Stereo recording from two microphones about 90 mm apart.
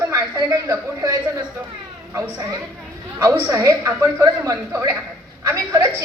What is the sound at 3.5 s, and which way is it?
A woman's voice, 35° right (ahead or behind).